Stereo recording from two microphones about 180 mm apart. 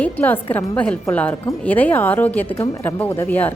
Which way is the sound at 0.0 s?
10° left (ahead or behind).